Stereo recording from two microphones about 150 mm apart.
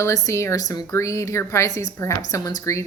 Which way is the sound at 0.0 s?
20° left (ahead or behind).